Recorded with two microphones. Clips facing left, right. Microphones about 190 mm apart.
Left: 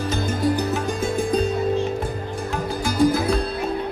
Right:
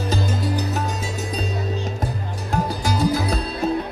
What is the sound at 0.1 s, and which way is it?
Music, 55° left (ahead or behind).